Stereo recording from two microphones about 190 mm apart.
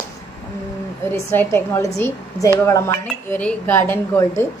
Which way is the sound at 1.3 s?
10° left (ahead or behind).